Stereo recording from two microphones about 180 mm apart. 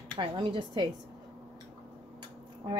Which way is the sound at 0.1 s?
30° right (ahead or behind).